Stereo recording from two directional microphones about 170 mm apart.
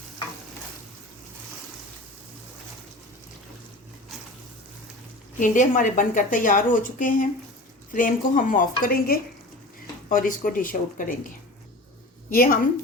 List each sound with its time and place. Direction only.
5.4 s a woman's voice: 50° left (ahead or behind)
12.3 s a woman's voice: 60° left (ahead or behind)